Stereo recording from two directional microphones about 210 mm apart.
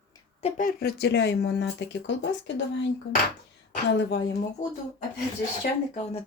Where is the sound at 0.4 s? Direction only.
40° left (ahead or behind); by 2.6 s 55° left (ahead or behind).